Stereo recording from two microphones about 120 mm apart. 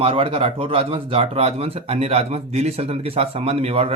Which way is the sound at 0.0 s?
50° right (ahead or behind).